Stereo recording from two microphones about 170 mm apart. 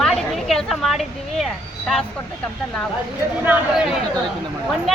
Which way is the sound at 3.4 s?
5° right (ahead or behind).